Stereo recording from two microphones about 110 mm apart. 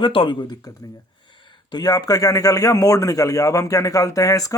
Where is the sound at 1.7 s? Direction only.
35° left (ahead or behind).